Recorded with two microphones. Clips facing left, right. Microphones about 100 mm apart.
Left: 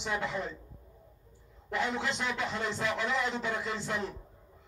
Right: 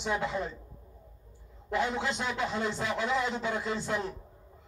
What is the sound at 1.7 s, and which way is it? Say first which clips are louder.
A man's voice: right 2 dB; 15° right (ahead or behind).